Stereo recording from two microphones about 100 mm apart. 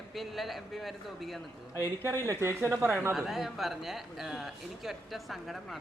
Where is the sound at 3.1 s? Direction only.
5° right (ahead or behind).